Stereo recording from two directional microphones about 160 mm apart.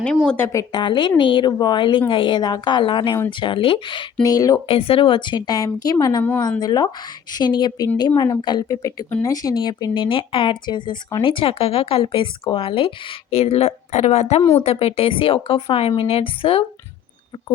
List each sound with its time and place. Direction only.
0.0 s speech: 5° left (ahead or behind)
0.3 s speech: 15° left (ahead or behind)
0.7 s a woman's voice: 30° left (ahead or behind)
4.7 s a woman's voice: 35° left (ahead or behind)